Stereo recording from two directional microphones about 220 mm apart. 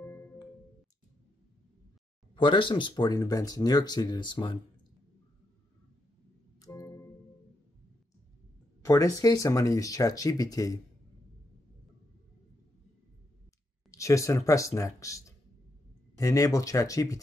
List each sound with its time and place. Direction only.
0.0 s music: 10° left (ahead or behind)
2.3 s speech: 20° left (ahead or behind)
6.6 s music: 15° left (ahead or behind)
8.8 s speech: 15° left (ahead or behind)
13.8 s speech: 15° left (ahead or behind)